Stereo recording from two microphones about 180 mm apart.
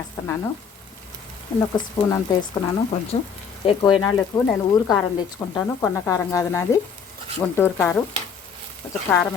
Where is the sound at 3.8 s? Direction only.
20° left (ahead or behind).